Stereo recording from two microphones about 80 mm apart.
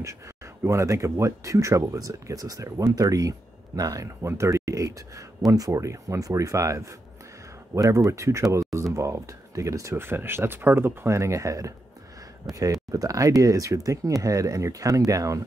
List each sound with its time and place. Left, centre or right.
0.7 s speech: right
9.9 s speech: right